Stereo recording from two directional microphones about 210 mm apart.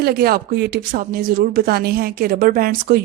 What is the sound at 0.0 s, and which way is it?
Speech, 45° right (ahead or behind).